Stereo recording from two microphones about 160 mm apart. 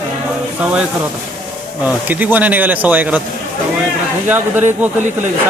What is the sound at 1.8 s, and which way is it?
Speech, 10° right (ahead or behind).